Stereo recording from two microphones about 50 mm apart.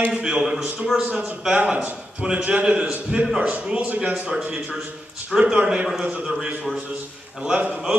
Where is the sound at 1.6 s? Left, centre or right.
Right.